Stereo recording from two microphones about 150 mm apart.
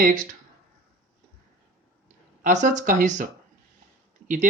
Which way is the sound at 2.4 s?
55° right (ahead or behind).